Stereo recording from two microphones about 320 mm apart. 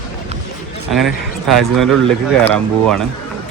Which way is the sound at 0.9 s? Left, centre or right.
Centre.